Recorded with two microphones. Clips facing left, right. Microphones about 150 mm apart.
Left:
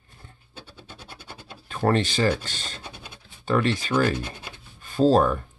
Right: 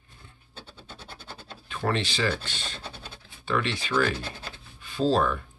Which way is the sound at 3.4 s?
45° left (ahead or behind).